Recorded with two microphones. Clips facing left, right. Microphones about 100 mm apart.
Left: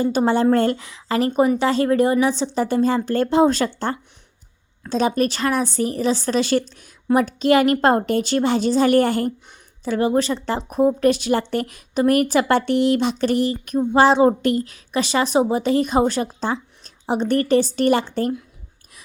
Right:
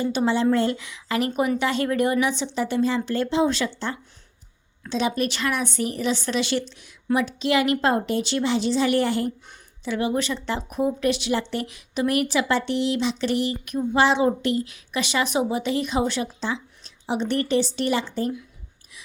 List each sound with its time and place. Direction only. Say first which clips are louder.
0.0 s a woman's voice: left 4 dB; 40° left (ahead or behind); by 18.3 s 65° left (ahead or behind)